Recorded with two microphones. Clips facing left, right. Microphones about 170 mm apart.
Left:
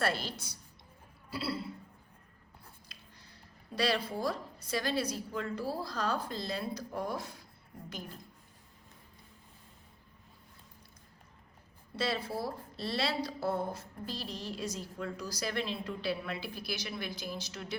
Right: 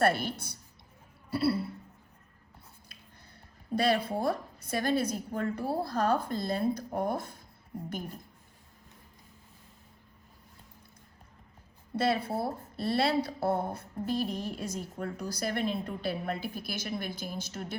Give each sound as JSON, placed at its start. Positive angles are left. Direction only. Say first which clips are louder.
{"t": 0.0, "sound": "a woman's voice", "louder": "right 6 dB", "side_deg": -55}
{"t": 2.9, "sound": "a sound", "louder": "right 1 dB", "side_deg": -55}
{"t": 3.8, "sound": "speech", "louder": "right 4 dB", "side_deg": -55}
{"t": 11.9, "sound": "a woman's voice", "louder": "right 5 dB", "side_deg": -55}